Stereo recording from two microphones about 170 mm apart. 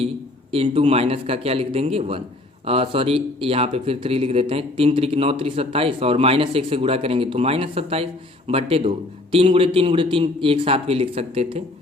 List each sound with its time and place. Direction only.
0.5 s speech: 35° right (ahead or behind)